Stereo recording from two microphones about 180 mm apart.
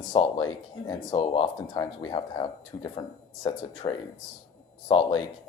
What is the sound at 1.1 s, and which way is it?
Speech, 30° left (ahead or behind).